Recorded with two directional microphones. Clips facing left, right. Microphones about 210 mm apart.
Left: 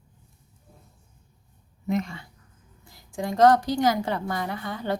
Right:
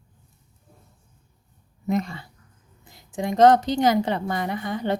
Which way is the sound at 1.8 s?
35° right (ahead or behind).